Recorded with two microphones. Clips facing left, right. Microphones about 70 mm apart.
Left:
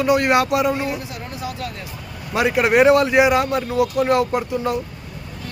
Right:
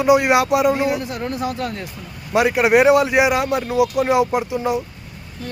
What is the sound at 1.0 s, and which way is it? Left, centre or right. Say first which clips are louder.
Speech: right 6 dB; right.